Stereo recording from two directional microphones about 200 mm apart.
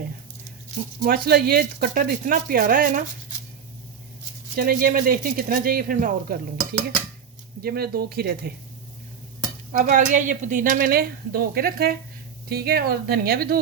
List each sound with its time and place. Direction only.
1.0 s speech: 50° right (ahead or behind)
4.5 s speech: 45° right (ahead or behind)
7.6 s speech: 50° right (ahead or behind)
9.8 s speech: 40° right (ahead or behind)